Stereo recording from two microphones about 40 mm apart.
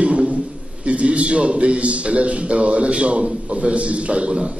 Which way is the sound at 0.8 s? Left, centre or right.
Right.